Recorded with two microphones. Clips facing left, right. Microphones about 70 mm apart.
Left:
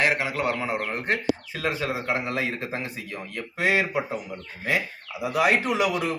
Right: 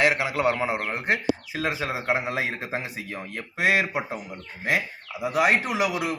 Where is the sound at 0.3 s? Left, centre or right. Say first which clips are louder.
Right 2 dB; right.